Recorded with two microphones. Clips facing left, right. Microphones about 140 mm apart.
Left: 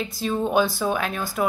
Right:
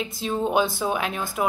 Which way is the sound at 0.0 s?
20° right (ahead or behind).